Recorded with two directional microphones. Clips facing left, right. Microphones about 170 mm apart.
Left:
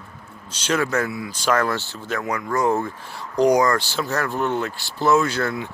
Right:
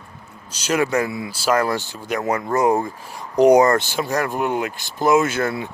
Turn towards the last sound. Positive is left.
turn(degrees=-20)  # may be behind; listen again after turning